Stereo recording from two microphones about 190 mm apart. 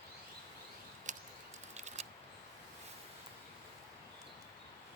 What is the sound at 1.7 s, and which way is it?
Scissors, 35° right (ahead or behind).